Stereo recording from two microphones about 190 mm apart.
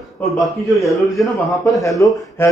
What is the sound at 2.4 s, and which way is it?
Speech, 10° left (ahead or behind).